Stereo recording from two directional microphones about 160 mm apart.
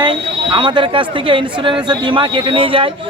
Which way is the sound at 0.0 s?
30° right (ahead or behind).